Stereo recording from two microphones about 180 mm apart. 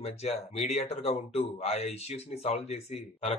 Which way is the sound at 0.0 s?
35° left (ahead or behind).